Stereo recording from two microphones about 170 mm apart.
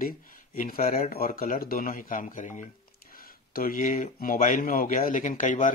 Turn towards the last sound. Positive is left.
turn(degrees=50)  # may be behind; listen again after turning